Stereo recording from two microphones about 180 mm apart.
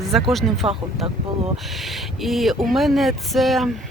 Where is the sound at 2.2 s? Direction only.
Centre (ahead or behind).